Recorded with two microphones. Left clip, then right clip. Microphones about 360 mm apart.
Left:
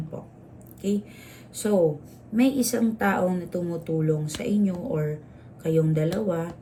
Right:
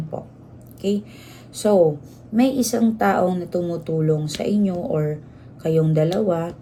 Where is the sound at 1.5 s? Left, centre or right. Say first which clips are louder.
Right 6 dB; centre.